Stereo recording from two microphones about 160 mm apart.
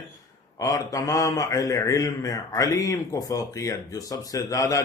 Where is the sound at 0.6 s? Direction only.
20° left (ahead or behind).